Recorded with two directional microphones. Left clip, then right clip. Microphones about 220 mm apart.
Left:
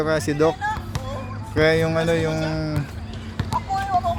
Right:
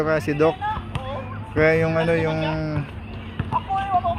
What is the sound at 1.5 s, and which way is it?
Speech, 10° left (ahead or behind).